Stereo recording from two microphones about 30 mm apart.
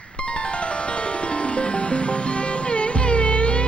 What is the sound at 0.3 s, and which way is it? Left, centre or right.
Music, left.